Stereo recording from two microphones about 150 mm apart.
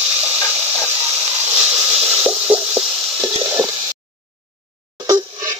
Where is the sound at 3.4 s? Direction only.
15° right (ahead or behind).